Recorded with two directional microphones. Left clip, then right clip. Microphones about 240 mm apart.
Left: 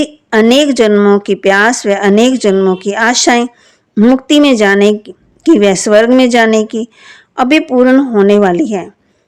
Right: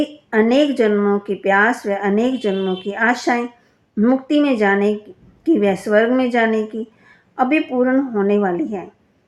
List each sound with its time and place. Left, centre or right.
0.0 s speech: left